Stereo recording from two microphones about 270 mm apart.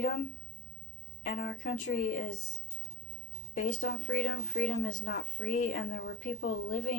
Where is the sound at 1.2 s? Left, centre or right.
Left.